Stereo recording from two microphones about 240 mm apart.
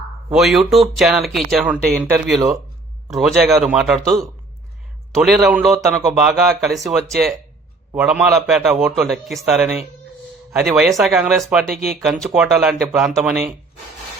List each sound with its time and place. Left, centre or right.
0.3 s a man's voice: centre
11.7 s speech: right
12.0 s a man's voice: centre